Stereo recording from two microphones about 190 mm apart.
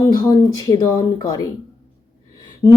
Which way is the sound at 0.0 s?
20° left (ahead or behind).